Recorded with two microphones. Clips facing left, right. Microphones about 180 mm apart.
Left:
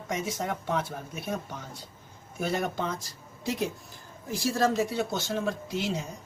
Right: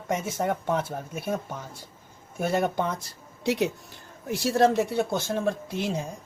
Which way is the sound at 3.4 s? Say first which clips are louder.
Right 5 dB; 70° right (ahead or behind).